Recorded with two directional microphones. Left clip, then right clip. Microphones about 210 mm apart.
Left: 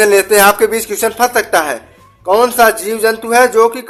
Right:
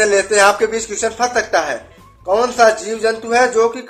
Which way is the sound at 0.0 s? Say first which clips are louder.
Left 4 dB; 40° left (ahead or behind).